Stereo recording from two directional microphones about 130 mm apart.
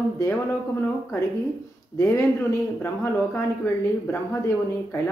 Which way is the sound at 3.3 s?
20° left (ahead or behind).